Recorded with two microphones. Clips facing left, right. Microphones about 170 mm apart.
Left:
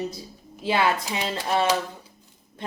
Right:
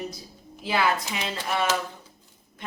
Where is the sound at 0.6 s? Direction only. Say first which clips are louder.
Left 2 dB; 25° left (ahead or behind).